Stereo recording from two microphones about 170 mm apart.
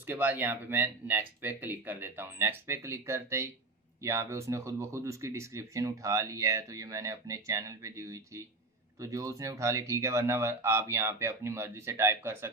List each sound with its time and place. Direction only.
0.0 s speech: 10° right (ahead or behind)